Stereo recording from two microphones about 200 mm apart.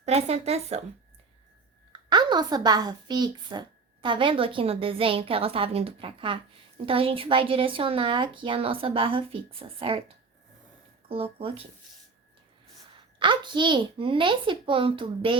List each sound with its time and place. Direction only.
0.0 s a woman's voice: 35° right (ahead or behind)
1.9 s a woman's voice: 20° right (ahead or behind)
11.1 s a woman's voice: 30° right (ahead or behind)
13.1 s a woman's voice: 25° right (ahead or behind)